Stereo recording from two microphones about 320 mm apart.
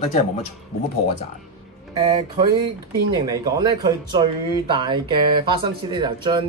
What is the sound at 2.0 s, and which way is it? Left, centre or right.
Speech, centre.